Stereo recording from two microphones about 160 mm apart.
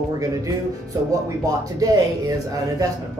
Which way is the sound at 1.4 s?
20° right (ahead or behind).